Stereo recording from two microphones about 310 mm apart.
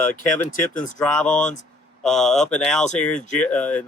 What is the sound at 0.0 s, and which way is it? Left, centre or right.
Speech, centre.